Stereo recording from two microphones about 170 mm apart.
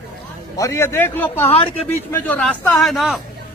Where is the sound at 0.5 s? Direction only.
15° left (ahead or behind); by 3.2 s centre (ahead or behind).